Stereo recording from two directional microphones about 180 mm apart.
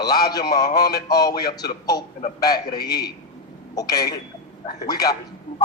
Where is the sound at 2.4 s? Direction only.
20° left (ahead or behind).